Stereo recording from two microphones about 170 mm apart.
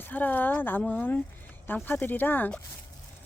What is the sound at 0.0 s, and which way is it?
Speech, 10° left (ahead or behind).